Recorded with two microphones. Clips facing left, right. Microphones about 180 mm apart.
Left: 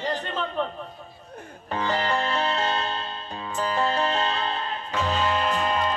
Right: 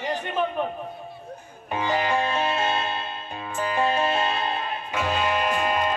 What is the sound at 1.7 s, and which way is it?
Music, 15° right (ahead or behind).